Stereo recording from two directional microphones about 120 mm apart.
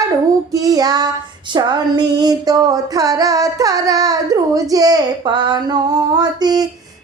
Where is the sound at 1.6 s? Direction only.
35° right (ahead or behind).